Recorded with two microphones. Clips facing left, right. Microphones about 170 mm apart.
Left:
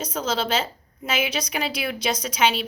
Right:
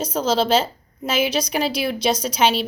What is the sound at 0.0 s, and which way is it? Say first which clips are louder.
A woman's voice: right 6 dB; 35° right (ahead or behind).